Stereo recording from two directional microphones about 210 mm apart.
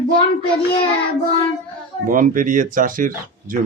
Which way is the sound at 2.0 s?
40° right (ahead or behind).